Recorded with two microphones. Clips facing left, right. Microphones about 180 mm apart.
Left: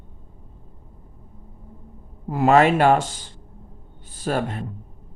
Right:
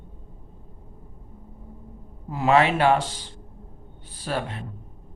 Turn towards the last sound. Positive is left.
turn(degrees=45)  # may be behind; listen again after turning